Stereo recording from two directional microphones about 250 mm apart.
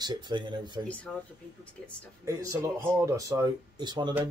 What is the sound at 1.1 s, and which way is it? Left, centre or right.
Speech, centre.